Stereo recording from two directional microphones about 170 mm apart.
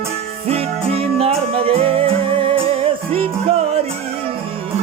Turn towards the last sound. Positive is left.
turn(degrees=-35)  # may be behind; listen again after turning